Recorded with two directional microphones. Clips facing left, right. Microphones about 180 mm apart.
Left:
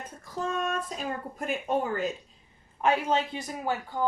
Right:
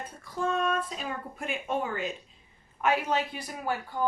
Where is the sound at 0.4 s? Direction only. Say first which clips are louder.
Right 3 dB; 45° left (ahead or behind).